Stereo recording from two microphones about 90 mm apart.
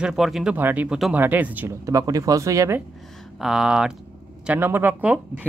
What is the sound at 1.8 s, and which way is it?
Speech, 35° right (ahead or behind).